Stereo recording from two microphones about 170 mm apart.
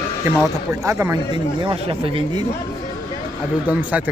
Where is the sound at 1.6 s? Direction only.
35° right (ahead or behind).